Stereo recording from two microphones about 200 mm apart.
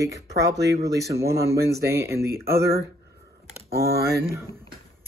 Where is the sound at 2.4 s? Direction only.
50° right (ahead or behind).